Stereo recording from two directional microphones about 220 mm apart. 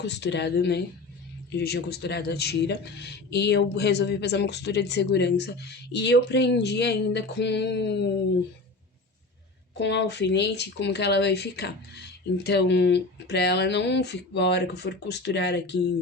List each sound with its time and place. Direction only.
0.0 s speech: 50° left (ahead or behind)
9.7 s speech: 50° left (ahead or behind)